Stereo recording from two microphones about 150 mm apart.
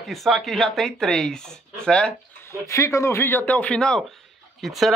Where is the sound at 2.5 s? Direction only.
20° left (ahead or behind).